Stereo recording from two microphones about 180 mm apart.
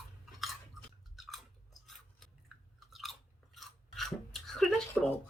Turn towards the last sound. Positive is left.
turn(degrees=10)  # may be behind; listen again after turning